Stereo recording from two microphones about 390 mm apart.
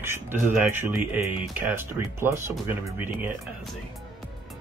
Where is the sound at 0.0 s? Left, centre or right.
Centre.